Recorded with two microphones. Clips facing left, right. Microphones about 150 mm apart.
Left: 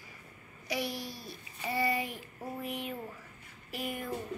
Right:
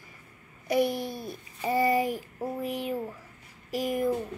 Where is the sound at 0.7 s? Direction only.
50° right (ahead or behind); by 3.0 s 35° right (ahead or behind).